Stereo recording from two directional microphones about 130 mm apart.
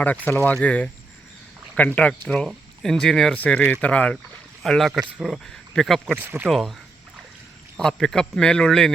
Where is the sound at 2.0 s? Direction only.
10° left (ahead or behind).